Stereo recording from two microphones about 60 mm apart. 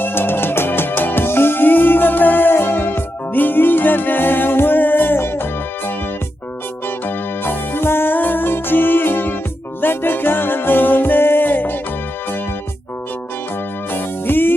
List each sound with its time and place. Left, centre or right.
0.0 s music: left
7.4 s music: left
13.9 s music: left